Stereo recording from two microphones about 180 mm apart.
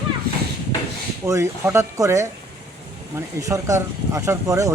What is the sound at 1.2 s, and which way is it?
Speech, 15° right (ahead or behind).